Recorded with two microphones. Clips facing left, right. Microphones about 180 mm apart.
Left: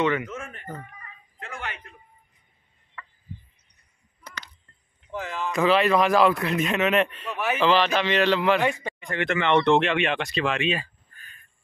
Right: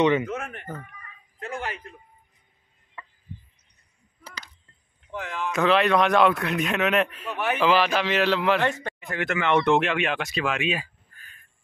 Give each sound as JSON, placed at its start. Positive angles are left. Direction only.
{"t": 0.0, "sound": "speech", "side_deg": -20}
{"t": 0.3, "sound": "speech", "side_deg": -65}
{"t": 1.4, "sound": "a sound", "side_deg": -35}
{"t": 3.0, "sound": "chicken", "side_deg": -25}
{"t": 5.1, "sound": "a man's voice", "side_deg": 0}
{"t": 8.6, "sound": "a man's voice", "side_deg": 10}
{"t": 9.0, "sound": "a man's voice", "side_deg": -5}